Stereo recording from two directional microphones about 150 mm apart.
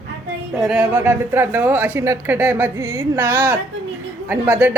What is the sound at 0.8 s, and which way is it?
Speech, 15° right (ahead or behind).